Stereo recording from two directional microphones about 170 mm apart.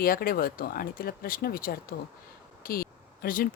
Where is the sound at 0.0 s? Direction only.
60° left (ahead or behind).